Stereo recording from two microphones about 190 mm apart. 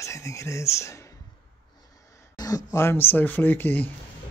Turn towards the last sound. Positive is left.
turn(degrees=10)  # may be behind; listen again after turning